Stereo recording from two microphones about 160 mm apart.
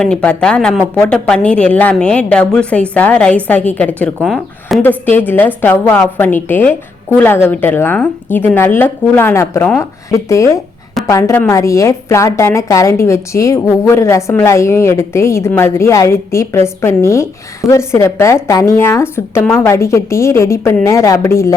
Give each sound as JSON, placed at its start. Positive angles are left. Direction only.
{"t": 0.0, "sound": "a woman's voice", "side_deg": 5}
{"t": 4.8, "sound": "a woman's voice", "side_deg": 10}